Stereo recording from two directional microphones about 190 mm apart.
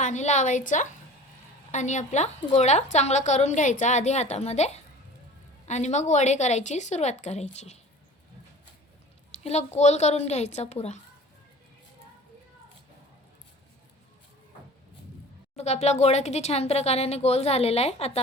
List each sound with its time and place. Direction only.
0.0 s a woman's voice: 40° left (ahead or behind)
9.4 s a woman's voice: 35° left (ahead or behind)
15.5 s a woman's voice: 35° left (ahead or behind)